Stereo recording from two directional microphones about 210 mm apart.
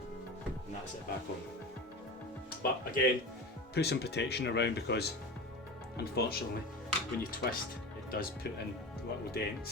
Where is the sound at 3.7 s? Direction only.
50° left (ahead or behind).